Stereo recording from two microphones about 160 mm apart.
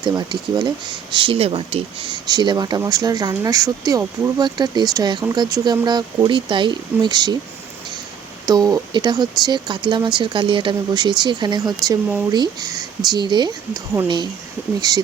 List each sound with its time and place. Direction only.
0.0 s speech: 25° right (ahead or behind)
8.4 s speech: 25° right (ahead or behind)